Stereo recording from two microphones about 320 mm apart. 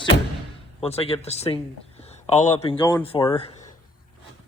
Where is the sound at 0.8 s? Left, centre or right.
Centre.